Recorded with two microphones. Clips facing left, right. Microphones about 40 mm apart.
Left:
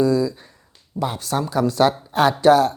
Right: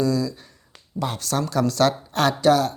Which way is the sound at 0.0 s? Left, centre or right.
Left.